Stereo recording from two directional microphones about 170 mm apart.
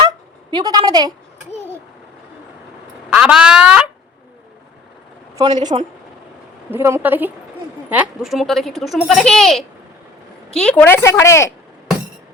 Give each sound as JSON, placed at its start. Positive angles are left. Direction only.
{"t": 0.5, "sound": "a woman's voice", "side_deg": -25}
{"t": 3.1, "sound": "a child's voice", "side_deg": -5}
{"t": 5.4, "sound": "a woman's voice", "side_deg": -25}
{"t": 6.7, "sound": "a woman's voice", "side_deg": -15}